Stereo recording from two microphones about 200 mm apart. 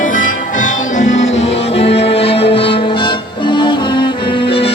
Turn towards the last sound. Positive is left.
turn(degrees=30)  # may be behind; listen again after turning